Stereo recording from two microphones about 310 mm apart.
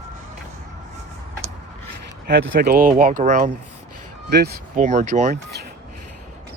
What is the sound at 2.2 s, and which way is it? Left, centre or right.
Speech, right.